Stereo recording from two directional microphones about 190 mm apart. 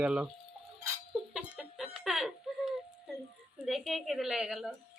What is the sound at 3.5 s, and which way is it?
A woman's voice, centre (ahead or behind).